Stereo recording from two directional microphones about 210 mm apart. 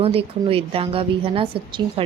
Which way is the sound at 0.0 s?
25° right (ahead or behind).